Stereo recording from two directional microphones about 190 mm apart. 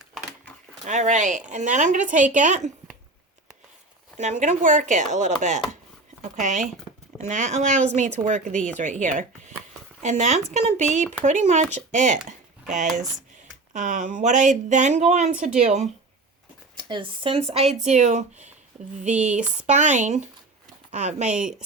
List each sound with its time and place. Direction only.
0.9 s speech: 40° right (ahead or behind)
4.2 s speech: 35° right (ahead or behind)
21.2 s a woman's voice: 5° right (ahead or behind)